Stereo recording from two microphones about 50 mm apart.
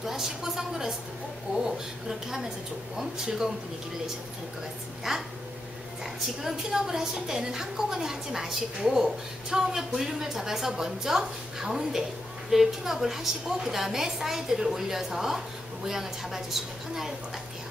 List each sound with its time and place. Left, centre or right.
0.0 s a woman's voice: centre
5.1 s a woman's voice: centre
6.4 s a woman's voice: centre